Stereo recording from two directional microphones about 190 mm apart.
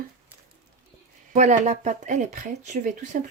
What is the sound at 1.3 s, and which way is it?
Speech, 40° right (ahead or behind).